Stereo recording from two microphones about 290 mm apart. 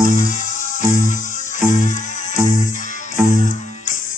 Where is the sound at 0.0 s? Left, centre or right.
Left.